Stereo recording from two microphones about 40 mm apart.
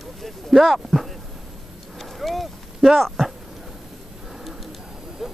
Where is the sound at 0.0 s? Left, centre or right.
Centre.